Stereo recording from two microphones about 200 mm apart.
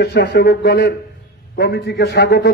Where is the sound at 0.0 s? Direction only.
60° left (ahead or behind).